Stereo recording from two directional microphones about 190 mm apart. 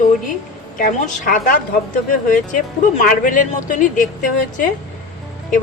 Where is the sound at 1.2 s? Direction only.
45° left (ahead or behind).